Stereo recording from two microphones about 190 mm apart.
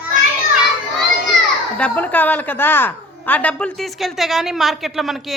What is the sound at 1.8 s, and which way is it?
A woman's voice, 10° left (ahead or behind).